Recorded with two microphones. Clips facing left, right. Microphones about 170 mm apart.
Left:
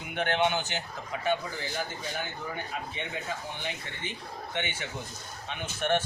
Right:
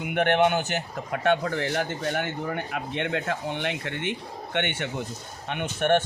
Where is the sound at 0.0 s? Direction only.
60° right (ahead or behind).